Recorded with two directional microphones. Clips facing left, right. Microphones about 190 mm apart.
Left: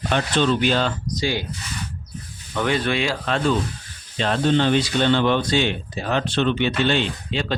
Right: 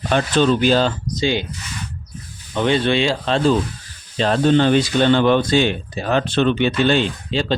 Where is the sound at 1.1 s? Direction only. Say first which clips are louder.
Right 5 dB; 20° right (ahead or behind).